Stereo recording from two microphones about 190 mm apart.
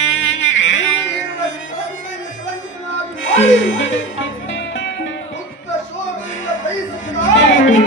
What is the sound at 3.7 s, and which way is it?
Music, 90° left.